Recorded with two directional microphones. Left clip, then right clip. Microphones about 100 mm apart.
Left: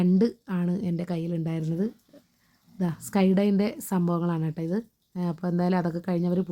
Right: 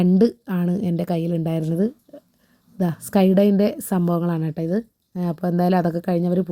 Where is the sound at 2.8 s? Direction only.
25° right (ahead or behind).